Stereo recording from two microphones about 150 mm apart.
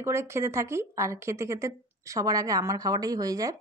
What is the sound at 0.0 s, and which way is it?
A woman's voice, 15° right (ahead or behind).